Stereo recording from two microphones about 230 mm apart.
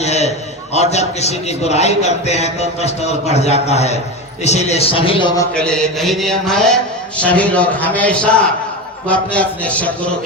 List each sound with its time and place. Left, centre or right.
0.0 s a man's voice: left
5.5 s mantra: centre